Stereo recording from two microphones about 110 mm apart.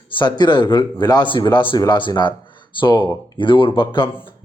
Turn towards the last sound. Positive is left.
turn(degrees=50)  # may be behind; listen again after turning